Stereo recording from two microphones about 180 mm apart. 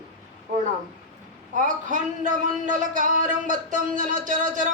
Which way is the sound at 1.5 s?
45° right (ahead or behind).